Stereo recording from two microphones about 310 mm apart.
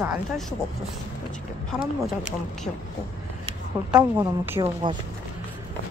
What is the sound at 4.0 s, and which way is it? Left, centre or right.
Speech, centre.